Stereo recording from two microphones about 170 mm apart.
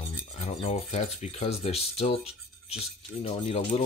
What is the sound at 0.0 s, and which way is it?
Speech, 40° left (ahead or behind).